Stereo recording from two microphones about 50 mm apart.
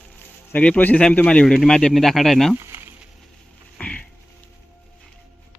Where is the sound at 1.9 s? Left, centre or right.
Centre.